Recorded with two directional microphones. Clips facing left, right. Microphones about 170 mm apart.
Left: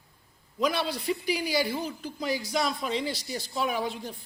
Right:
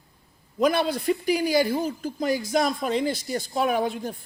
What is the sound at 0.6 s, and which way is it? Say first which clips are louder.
A woman's voice: right 6 dB; 50° right (ahead or behind).